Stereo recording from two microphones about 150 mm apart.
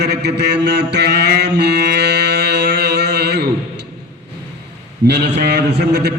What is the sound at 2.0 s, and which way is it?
Music, 90° right.